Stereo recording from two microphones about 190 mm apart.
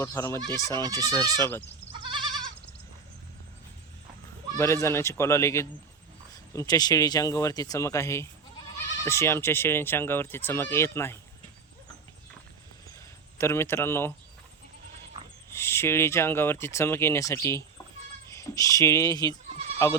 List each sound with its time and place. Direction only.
0.0 s speech: 15° left (ahead or behind)
0.9 s speech: 20° right (ahead or behind)
1.9 s goat: 25° right (ahead or behind)
4.5 s speech: 15° left (ahead or behind)
13.4 s speech: 15° left (ahead or behind)
15.4 s speech: 15° left (ahead or behind)